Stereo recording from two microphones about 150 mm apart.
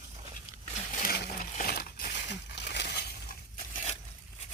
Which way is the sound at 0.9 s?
85° left.